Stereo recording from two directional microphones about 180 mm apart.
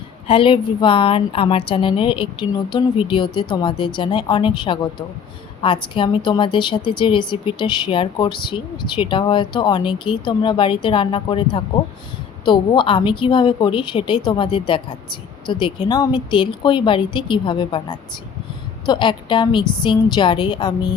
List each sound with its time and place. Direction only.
0.3 s a woman's voice: 30° left (ahead or behind)